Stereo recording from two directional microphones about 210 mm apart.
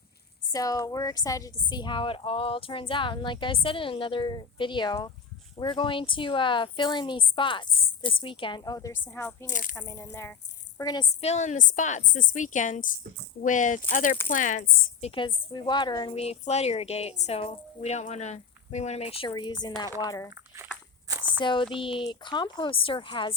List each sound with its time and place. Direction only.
0.5 s a woman's voice: 15° left (ahead or behind)
9.5 s a woman's voice: 40° left (ahead or behind)
9.7 s a woman's voice: 15° left (ahead or behind)
11.2 s a woman's voice: 30° left (ahead or behind)
15.0 s a woman's voice: 25° left (ahead or behind)
21.1 s a sound: 10° right (ahead or behind)
21.4 s a woman's voice: 20° left (ahead or behind)